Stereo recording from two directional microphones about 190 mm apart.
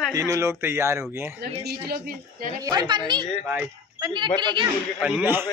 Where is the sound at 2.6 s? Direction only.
20° right (ahead or behind).